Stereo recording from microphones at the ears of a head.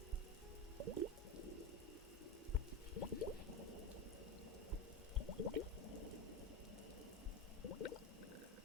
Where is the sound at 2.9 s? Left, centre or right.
Left.